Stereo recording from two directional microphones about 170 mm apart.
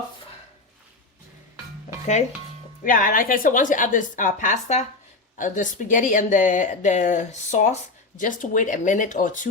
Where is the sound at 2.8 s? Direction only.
55° left (ahead or behind).